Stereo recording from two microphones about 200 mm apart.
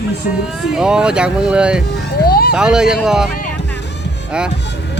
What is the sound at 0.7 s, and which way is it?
Speech, 5° right (ahead or behind).